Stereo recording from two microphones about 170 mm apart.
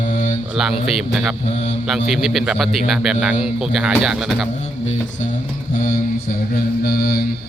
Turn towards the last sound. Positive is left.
turn(degrees=60)  # may be behind; listen again after turning